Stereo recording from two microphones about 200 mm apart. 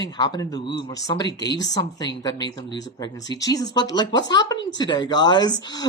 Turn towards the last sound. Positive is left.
turn(degrees=20)  # may be behind; listen again after turning